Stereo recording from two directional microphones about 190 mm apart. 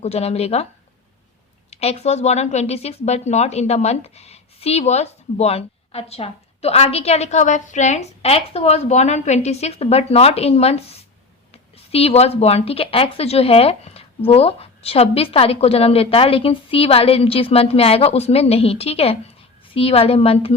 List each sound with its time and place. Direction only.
0.0 s a woman's voice: 35° left (ahead or behind)
1.7 s a woman's voice: 35° left (ahead or behind)